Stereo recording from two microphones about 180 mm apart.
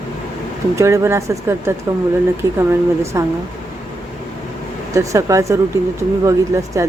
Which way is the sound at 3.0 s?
15° right (ahead or behind).